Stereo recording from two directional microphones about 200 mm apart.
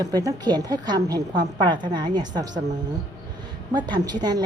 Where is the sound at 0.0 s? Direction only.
15° right (ahead or behind).